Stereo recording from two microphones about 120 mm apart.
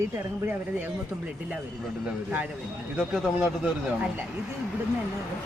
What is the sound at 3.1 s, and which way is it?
Speech, 5° right (ahead or behind).